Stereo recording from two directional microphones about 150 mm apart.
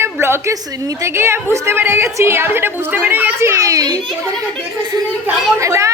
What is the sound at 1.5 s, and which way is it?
A woman's voice, 20° right (ahead or behind).